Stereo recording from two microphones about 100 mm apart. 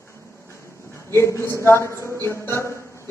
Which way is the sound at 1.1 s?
25° left (ahead or behind).